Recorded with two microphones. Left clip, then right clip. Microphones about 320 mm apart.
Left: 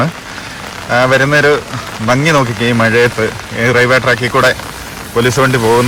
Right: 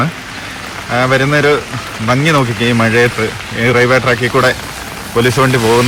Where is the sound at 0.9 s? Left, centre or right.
Centre.